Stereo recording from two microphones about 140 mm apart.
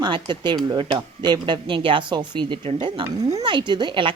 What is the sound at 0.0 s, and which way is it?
Speech, 35° right (ahead or behind).